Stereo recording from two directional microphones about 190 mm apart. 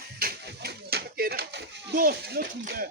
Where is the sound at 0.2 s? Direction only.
55° right (ahead or behind).